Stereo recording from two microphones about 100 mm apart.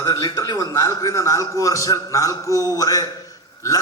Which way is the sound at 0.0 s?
40° left (ahead or behind).